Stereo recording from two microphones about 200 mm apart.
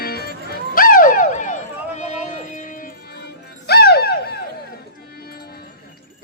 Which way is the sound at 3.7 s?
50° left (ahead or behind).